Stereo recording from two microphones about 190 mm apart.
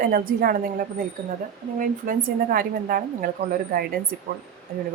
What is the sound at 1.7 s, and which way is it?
A woman's voice, 45° right (ahead or behind).